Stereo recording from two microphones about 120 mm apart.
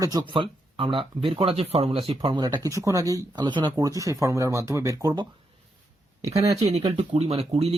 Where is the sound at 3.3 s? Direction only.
40° right (ahead or behind).